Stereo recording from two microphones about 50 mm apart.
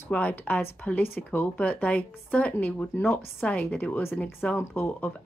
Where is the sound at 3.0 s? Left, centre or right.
Left.